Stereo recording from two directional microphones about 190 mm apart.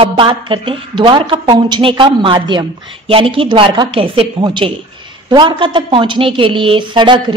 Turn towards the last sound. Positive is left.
turn(degrees=-25)  # may be behind; listen again after turning